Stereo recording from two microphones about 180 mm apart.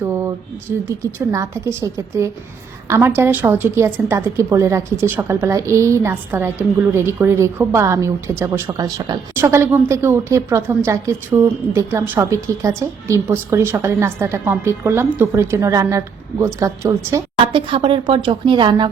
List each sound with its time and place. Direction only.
0.0 s a sound: 15° right (ahead or behind)
0.9 s a woman's voice: 15° right (ahead or behind)
17.4 s speech: 30° right (ahead or behind)